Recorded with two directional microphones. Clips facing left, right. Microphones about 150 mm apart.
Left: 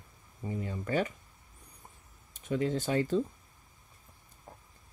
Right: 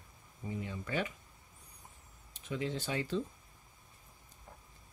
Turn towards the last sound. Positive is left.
turn(degrees=45)  # may be behind; listen again after turning